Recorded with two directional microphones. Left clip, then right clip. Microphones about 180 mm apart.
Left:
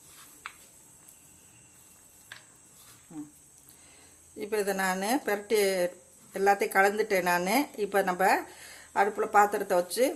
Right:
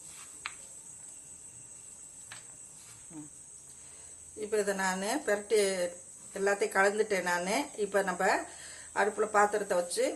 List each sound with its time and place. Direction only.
4.4 s speech: 40° left (ahead or behind)